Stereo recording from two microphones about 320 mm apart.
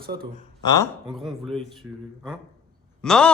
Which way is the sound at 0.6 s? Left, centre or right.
Centre.